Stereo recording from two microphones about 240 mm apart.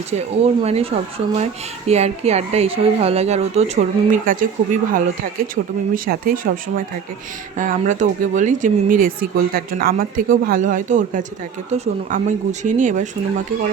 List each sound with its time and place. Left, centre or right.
0.1 s a woman's voice: right
7.5 s speech: right